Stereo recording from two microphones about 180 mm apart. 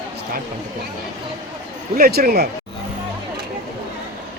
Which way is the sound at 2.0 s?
55° right (ahead or behind).